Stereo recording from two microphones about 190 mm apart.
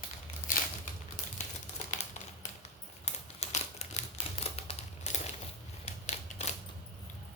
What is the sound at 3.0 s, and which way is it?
Typewriter, 35° left (ahead or behind).